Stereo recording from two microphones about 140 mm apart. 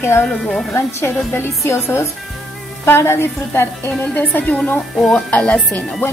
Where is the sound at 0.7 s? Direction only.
15° left (ahead or behind).